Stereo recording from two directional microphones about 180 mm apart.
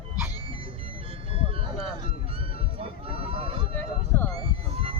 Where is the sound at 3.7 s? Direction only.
10° left (ahead or behind).